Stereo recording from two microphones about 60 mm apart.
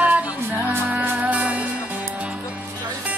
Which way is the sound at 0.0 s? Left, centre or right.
Right.